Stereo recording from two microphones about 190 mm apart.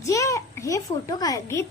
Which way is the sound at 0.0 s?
15° left (ahead or behind).